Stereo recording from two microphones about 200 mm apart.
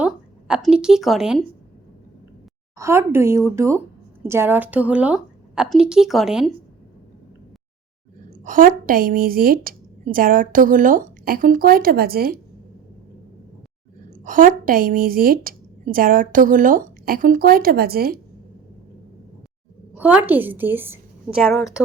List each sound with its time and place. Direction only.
0.0 s a woman's voice: 5° right (ahead or behind)
2.7 s a woman's voice: 15° right (ahead or behind)
8.3 s speech: 40° right (ahead or behind)
14.1 s speech: 40° right (ahead or behind)
19.9 s a woman's voice: 5° right (ahead or behind)